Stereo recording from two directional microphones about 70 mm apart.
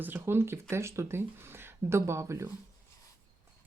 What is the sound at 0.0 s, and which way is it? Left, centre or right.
Speech, right.